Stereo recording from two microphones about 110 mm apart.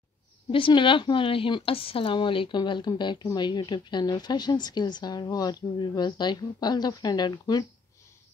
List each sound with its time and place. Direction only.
0.5 s a woman's voice: 50° left (ahead or behind)